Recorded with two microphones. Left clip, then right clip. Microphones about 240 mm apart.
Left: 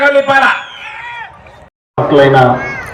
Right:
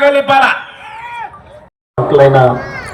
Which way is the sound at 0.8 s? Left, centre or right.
Right.